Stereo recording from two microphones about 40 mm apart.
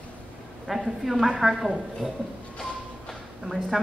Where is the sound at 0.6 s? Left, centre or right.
Centre.